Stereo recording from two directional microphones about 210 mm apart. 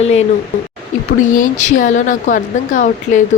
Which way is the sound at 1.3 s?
35° left (ahead or behind).